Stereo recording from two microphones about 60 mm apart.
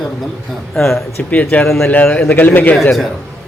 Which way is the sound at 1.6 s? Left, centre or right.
Centre.